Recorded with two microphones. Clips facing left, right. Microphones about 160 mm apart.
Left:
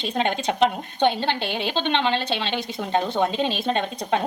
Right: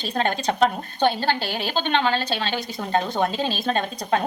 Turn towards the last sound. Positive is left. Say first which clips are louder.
# even
turn(degrees=20)  # may be behind; listen again after turning